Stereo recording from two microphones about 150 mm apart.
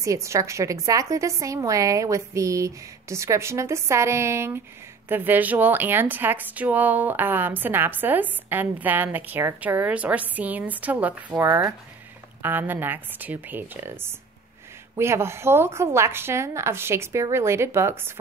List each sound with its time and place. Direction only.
0.0 s a woman's voice: 20° right (ahead or behind)